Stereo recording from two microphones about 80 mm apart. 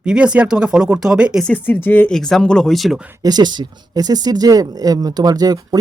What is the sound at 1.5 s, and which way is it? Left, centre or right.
Speech, left.